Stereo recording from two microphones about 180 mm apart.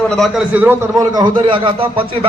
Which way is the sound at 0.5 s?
10° right (ahead or behind).